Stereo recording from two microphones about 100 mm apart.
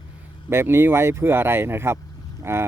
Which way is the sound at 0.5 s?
25° right (ahead or behind).